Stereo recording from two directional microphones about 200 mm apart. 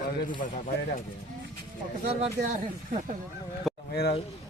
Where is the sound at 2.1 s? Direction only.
30° right (ahead or behind).